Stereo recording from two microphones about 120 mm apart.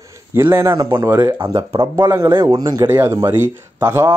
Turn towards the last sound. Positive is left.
turn(degrees=-20)  # may be behind; listen again after turning